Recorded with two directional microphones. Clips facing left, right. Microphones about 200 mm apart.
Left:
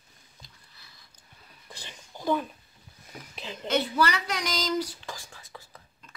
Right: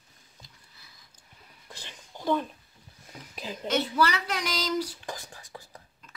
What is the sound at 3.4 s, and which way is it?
Speech, 5° right (ahead or behind).